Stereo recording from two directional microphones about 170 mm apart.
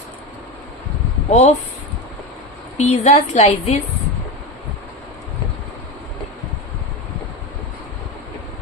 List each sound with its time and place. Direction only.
1.3 s a woman's voice: 40° left (ahead or behind)
2.7 s a woman's voice: 40° left (ahead or behind)